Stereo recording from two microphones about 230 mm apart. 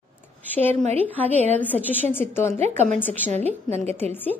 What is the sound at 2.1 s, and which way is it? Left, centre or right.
A woman's voice, centre.